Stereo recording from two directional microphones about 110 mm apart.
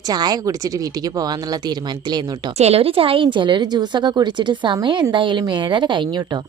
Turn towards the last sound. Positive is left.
turn(degrees=-45)  # may be behind; listen again after turning